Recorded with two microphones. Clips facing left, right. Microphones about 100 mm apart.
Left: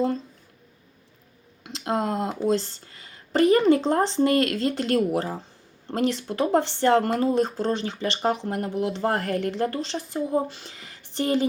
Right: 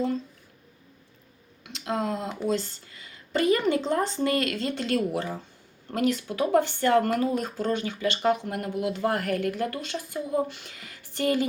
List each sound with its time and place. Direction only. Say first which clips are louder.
1.8 s speech: left 3 dB; 40° left (ahead or behind)